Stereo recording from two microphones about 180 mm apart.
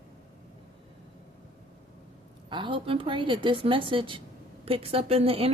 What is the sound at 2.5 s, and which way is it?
A woman's voice, 25° right (ahead or behind).